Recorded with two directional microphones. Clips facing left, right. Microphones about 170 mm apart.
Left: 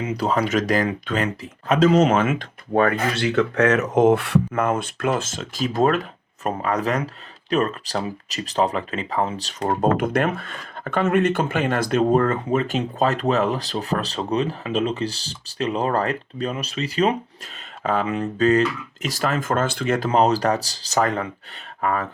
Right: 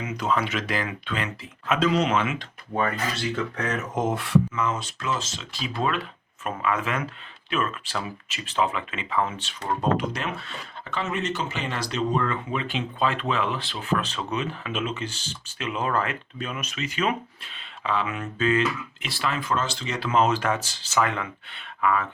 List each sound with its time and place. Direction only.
0.0 s speech: 35° left (ahead or behind); by 20.1 s 55° left (ahead or behind)
20.1 s speech: 35° left (ahead or behind)